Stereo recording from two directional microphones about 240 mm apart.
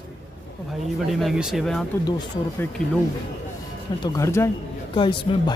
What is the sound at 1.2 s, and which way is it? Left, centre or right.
Speech, centre.